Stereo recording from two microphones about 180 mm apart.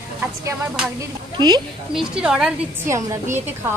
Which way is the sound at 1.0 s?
20° right (ahead or behind).